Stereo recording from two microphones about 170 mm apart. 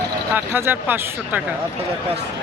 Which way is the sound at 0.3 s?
10° right (ahead or behind).